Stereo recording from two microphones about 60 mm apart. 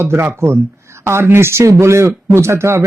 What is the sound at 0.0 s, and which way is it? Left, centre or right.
Speech, right.